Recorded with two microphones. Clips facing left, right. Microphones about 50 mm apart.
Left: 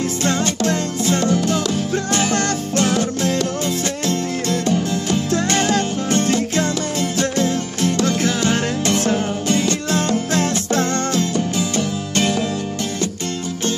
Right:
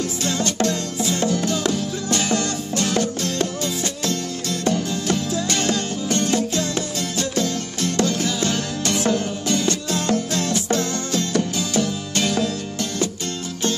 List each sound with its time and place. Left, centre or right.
0.2 s music: left
3.0 s music: left
5.5 s music: left
7.0 s music: left
9.5 s music: left
9.8 s music: left
11.8 s music: left